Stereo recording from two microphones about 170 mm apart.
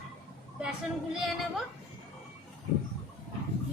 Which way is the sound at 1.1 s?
5° right (ahead or behind).